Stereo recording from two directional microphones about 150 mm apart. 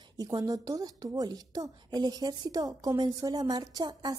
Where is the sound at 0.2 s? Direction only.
25° right (ahead or behind).